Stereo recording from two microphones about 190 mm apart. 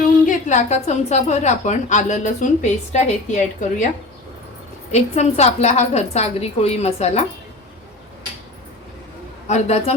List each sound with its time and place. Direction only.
0.3 s a woman's voice: 40° left (ahead or behind)
4.9 s a woman's voice: 35° left (ahead or behind)
9.5 s a woman's voice: 35° left (ahead or behind)